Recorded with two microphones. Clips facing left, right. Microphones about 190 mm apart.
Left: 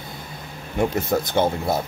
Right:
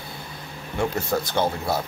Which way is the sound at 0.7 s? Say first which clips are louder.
Left 3 dB; 20° left (ahead or behind).